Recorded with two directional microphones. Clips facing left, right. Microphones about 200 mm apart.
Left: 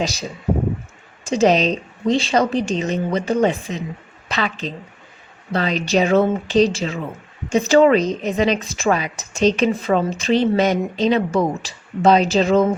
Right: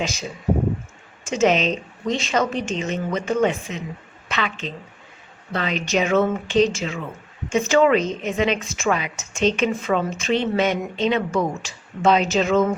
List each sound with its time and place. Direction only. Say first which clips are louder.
0.0 s a woman's voice: left 3 dB; 35° left (ahead or behind)